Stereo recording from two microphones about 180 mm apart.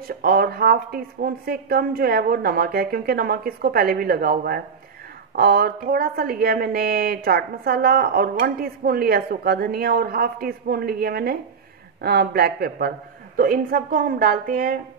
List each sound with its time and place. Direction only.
0.1 s a woman's voice: 55° right (ahead or behind)